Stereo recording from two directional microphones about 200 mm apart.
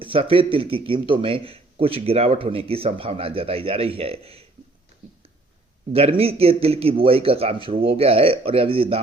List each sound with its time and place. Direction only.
0.0 s speech: 25° right (ahead or behind)
5.9 s speech: 30° right (ahead or behind)